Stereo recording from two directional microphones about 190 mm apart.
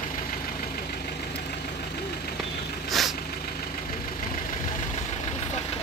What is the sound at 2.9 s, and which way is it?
Vehicle, centre (ahead or behind).